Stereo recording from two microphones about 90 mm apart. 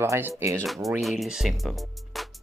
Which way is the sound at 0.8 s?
Centre (ahead or behind).